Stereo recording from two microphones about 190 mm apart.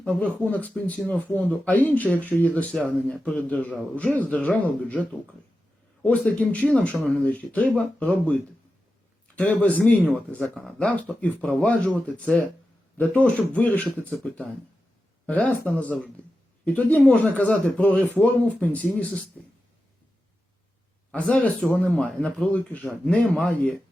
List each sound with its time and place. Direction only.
0.0 s speech: 5° left (ahead or behind)
21.1 s speech: 5° left (ahead or behind)